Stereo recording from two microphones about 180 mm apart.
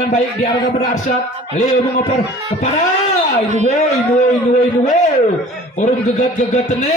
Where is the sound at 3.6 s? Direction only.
40° left (ahead or behind).